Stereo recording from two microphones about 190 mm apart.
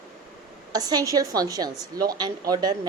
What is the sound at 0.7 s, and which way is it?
A woman's voice, 20° right (ahead or behind).